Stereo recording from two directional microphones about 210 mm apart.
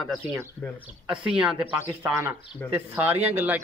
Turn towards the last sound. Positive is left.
turn(degrees=-10)  # may be behind; listen again after turning